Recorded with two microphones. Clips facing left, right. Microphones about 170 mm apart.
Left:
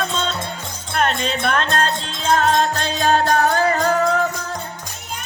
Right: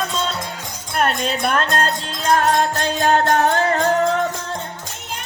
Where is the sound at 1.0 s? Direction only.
5° right (ahead or behind).